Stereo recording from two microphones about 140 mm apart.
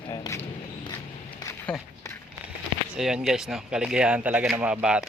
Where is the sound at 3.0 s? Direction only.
5° right (ahead or behind).